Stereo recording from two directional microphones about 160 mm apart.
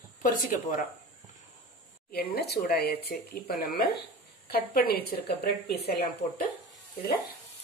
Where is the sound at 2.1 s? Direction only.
80° left.